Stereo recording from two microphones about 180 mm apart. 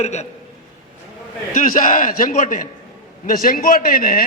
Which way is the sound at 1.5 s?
50° left (ahead or behind).